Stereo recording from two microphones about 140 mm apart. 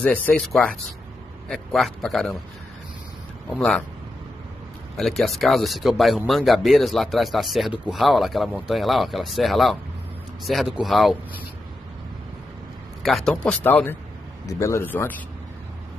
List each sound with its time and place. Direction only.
0.3 s speech: 5° left (ahead or behind)
3.5 s speech: 5° left (ahead or behind)
4.9 s speech: centre (ahead or behind)
13.0 s speech: 5° left (ahead or behind)